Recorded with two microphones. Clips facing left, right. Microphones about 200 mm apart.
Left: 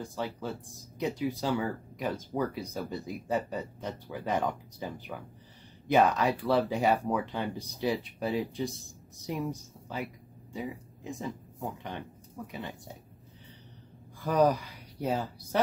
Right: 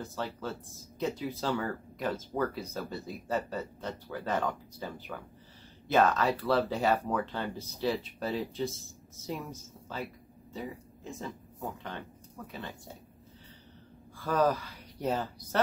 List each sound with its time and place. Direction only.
0.0 s speech: 15° left (ahead or behind)
12.4 s speech: 15° left (ahead or behind)
14.2 s speech: 15° left (ahead or behind)